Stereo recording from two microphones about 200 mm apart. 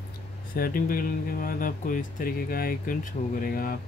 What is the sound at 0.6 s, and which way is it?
Speech, 45° left (ahead or behind).